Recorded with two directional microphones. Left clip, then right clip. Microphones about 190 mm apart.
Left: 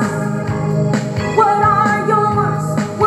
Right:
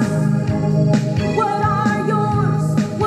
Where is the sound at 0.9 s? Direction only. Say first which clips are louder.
Left 1 dB; 25° right (ahead or behind).